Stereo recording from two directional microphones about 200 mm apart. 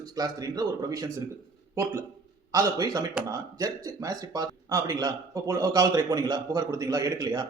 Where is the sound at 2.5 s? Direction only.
20° right (ahead or behind).